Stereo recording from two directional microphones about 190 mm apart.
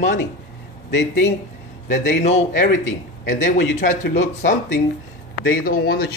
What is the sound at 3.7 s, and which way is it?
Speech, 40° left (ahead or behind).